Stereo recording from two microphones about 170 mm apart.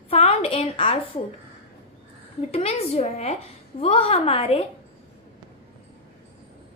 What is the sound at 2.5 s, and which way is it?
A woman's voice, 35° left (ahead or behind).